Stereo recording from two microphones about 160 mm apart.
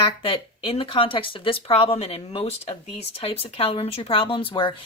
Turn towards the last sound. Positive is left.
turn(degrees=30)  # may be behind; listen again after turning